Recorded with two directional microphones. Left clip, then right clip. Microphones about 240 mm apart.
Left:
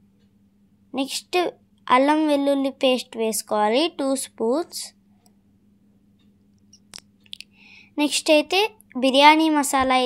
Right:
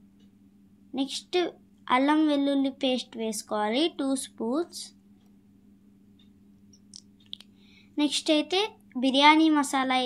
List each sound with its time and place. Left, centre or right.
0.9 s a woman's voice: left
6.7 s clicking: left